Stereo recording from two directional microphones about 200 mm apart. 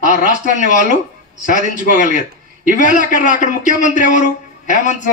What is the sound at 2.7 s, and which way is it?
A man's voice, 40° left (ahead or behind).